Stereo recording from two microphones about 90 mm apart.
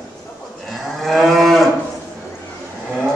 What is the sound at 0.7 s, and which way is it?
Moo, centre (ahead or behind).